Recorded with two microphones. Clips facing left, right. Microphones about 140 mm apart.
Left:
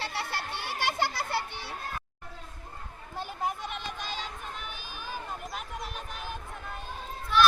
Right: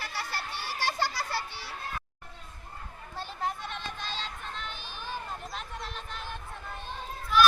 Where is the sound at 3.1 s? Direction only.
15° left (ahead or behind).